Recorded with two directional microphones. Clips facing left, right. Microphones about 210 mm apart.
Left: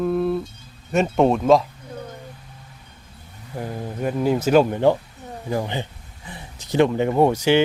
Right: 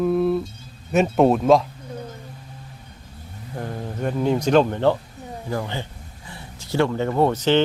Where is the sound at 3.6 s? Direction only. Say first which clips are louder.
Left 1 dB; 5° left (ahead or behind).